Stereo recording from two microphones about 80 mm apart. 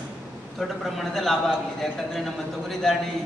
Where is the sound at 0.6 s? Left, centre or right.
Centre.